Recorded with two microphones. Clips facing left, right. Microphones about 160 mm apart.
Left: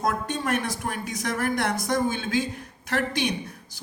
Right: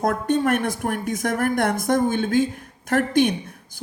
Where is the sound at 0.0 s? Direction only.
55° right (ahead or behind).